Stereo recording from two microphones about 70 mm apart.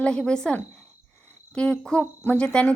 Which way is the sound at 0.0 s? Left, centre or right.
Centre.